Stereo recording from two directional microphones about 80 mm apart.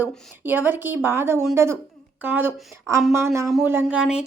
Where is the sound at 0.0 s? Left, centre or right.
Right.